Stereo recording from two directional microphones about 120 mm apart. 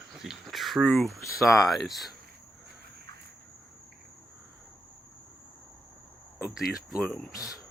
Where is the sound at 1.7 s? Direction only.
Centre (ahead or behind).